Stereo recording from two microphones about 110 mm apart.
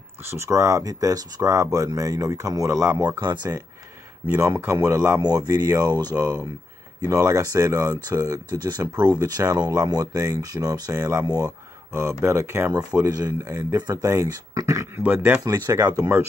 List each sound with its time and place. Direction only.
0.3 s speech: 25° right (ahead or behind)
3.0 s speech: 40° right (ahead or behind)
4.4 s speech: 20° right (ahead or behind)
12.7 s speech: 35° right (ahead or behind)
15.0 s speech: 20° right (ahead or behind)
15.4 s speech: 35° right (ahead or behind)